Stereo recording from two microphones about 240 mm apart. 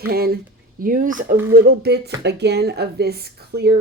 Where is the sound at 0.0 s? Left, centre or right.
Right.